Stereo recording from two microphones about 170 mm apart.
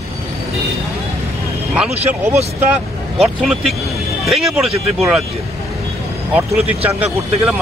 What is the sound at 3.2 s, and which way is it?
Speech, centre (ahead or behind).